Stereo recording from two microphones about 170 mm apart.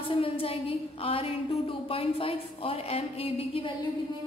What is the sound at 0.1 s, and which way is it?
A woman's voice, 35° left (ahead or behind).